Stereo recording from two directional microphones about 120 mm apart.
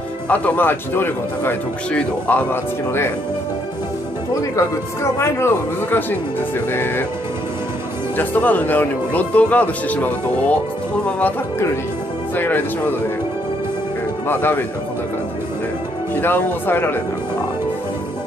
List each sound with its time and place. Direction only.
0.3 s a man's voice: 15° left (ahead or behind)
4.4 s a man's voice: 25° left (ahead or behind)
8.2 s a man's voice: 15° left (ahead or behind)
12.4 s a man's voice: 15° left (ahead or behind)
14.2 s a man's voice: 15° left (ahead or behind)
16.2 s a man's voice: 15° left (ahead or behind)